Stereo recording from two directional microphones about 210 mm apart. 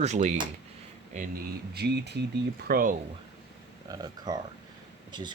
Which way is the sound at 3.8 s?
20° right (ahead or behind).